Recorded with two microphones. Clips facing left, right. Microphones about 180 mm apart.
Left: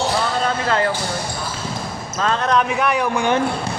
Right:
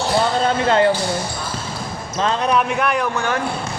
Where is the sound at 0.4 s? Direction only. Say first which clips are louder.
Right 4 dB; 25° right (ahead or behind).